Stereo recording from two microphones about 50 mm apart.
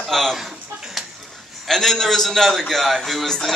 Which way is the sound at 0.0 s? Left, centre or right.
Centre.